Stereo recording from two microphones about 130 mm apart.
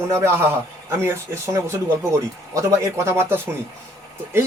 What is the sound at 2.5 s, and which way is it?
Speech, 20° right (ahead or behind).